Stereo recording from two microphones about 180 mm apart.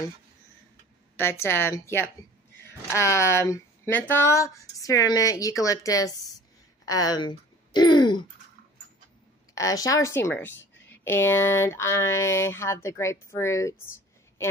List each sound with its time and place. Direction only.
1.1 s speech: 15° left (ahead or behind)
6.9 s a sound: 20° left (ahead or behind)
9.6 s speech: 20° left (ahead or behind)